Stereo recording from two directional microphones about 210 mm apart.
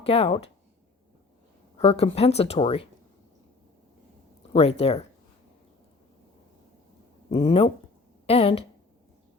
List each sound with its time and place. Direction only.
0.0 s speech: 30° left (ahead or behind)
1.8 s speech: 30° left (ahead or behind)
4.5 s speech: 30° left (ahead or behind)
7.3 s speech: 25° left (ahead or behind)